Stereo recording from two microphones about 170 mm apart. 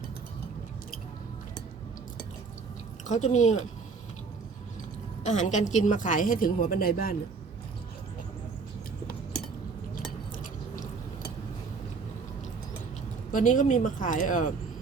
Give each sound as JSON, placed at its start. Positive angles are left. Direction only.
{"t": 3.1, "sound": "a woman's voice", "side_deg": 45}
{"t": 5.2, "sound": "a woman's voice", "side_deg": 45}
{"t": 9.9, "sound": "a sound", "side_deg": 50}
{"t": 13.3, "sound": "a woman's voice", "side_deg": 50}